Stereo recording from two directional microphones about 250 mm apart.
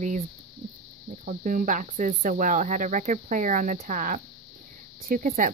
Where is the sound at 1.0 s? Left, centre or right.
Right.